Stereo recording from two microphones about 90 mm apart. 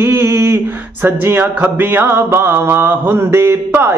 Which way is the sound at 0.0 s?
30° right (ahead or behind).